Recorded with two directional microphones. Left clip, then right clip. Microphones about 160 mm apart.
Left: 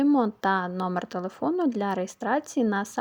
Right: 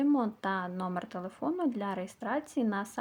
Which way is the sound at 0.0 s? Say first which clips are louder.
Left 7 dB; 40° left (ahead or behind).